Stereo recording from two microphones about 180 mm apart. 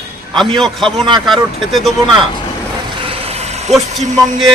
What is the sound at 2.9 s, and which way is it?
Vehicle, 30° right (ahead or behind).